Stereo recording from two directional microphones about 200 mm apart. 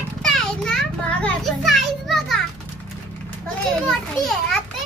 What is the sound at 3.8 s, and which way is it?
Speech, centre (ahead or behind).